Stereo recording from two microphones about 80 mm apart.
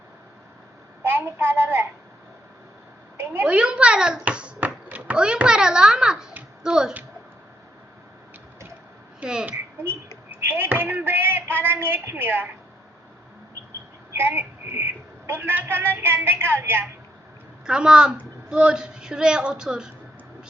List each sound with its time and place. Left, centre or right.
1.0 s a child's voice: right
3.4 s a child's voice: centre
9.2 s speech: centre
9.8 s speech: right
14.2 s a woman's voice: right
17.7 s speech: centre